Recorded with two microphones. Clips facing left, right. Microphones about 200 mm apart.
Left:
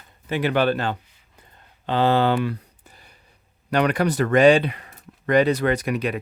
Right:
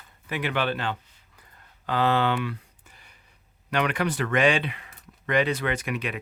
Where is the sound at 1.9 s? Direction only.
30° left (ahead or behind).